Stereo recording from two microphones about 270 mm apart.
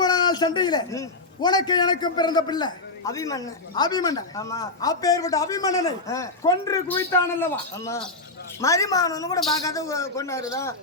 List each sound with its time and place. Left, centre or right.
0.0 s a man's voice: centre